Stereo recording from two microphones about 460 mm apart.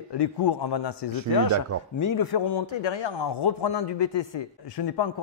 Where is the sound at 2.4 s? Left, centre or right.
Left.